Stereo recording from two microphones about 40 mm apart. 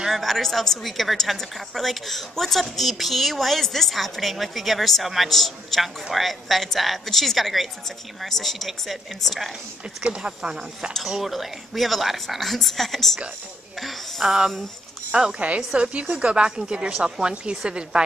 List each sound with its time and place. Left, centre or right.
0.1 s a woman's voice: centre
10.0 s a woman's voice: right
11.1 s a woman's voice: centre
15.0 s a woman's voice: right